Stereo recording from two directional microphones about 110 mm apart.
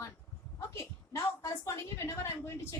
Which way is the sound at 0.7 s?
25° left (ahead or behind).